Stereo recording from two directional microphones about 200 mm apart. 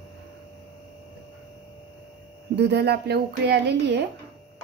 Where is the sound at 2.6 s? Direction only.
55° right (ahead or behind).